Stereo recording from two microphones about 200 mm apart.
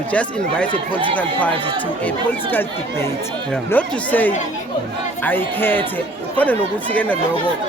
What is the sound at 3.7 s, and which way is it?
Speech, 10° left (ahead or behind).